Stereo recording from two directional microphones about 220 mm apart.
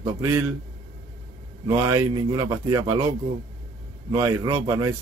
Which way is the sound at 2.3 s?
20° right (ahead or behind).